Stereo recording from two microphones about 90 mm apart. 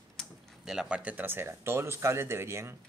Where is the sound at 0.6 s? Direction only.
5° right (ahead or behind); by 2.7 s 30° right (ahead or behind).